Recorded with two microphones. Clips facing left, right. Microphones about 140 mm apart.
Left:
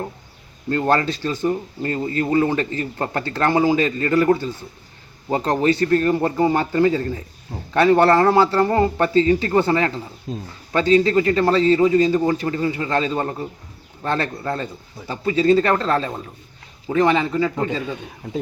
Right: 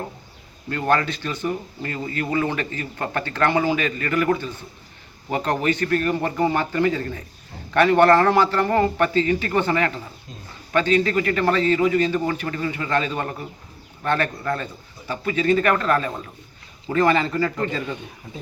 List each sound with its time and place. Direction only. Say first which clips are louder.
0.7 s a man's voice: left 3 dB; 30° left (ahead or behind); by 17.9 s 10° left (ahead or behind)